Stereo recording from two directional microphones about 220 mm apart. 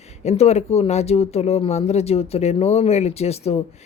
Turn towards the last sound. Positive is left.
turn(degrees=30)  # may be behind; listen again after turning